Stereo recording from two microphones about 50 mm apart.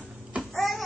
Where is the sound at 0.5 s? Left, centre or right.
Centre.